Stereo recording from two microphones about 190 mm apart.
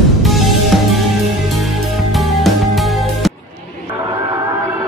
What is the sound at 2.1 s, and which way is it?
Music, centre (ahead or behind).